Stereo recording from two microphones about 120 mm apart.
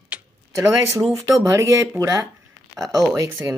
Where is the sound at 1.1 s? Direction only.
25° right (ahead or behind).